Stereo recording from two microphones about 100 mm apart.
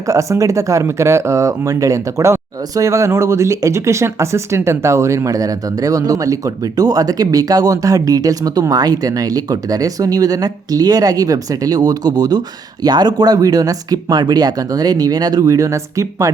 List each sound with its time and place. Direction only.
0.0 s speech: 35° right (ahead or behind)